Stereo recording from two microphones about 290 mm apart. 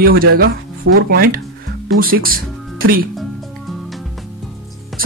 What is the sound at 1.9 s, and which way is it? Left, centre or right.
Speech, right.